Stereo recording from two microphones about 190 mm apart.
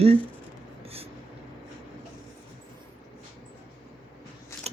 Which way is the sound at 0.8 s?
30° right (ahead or behind).